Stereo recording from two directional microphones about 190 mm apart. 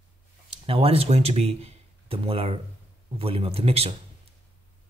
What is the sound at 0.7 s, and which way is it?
Speech, 30° right (ahead or behind).